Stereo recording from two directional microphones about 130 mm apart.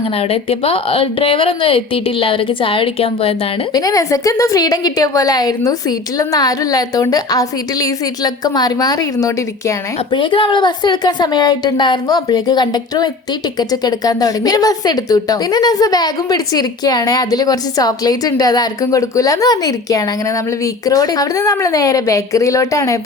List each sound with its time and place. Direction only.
0.2 s speech: 45° left (ahead or behind)
3.8 s speech: 25° left (ahead or behind)
10.2 s a woman's voice: 40° left (ahead or behind)